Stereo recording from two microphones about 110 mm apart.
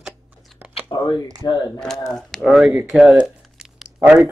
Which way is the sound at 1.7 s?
5° left (ahead or behind).